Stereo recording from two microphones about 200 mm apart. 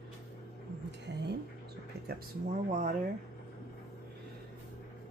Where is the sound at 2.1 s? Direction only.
40° right (ahead or behind).